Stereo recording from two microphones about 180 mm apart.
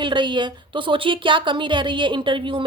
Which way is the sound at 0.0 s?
25° right (ahead or behind).